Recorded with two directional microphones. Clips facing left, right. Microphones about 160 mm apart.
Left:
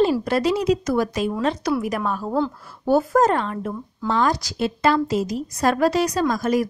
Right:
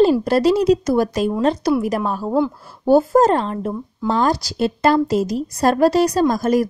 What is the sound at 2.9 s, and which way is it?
A woman's voice, 30° right (ahead or behind).